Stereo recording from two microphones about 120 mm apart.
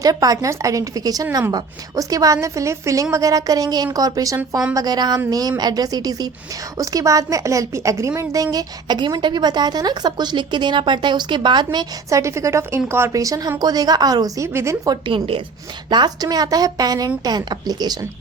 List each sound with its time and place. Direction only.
0.0 s a woman's voice: 30° right (ahead or behind)
12.0 s a woman's voice: 25° right (ahead or behind)
15.0 s speech: 45° right (ahead or behind)
15.9 s a woman's voice: 35° right (ahead or behind)